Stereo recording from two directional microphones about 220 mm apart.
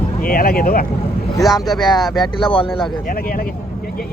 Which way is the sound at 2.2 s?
20° left (ahead or behind).